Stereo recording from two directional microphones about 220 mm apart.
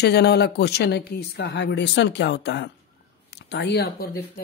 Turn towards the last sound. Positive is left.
turn(degrees=50)  # may be behind; listen again after turning